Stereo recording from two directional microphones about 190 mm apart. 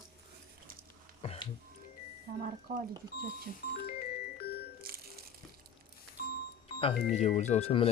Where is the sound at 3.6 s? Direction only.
55° left (ahead or behind).